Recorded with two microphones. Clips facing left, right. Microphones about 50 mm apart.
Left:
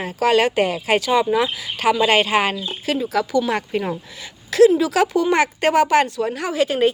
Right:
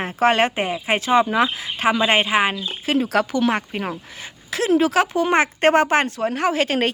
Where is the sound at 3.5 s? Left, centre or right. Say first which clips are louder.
Left 1 dB; right.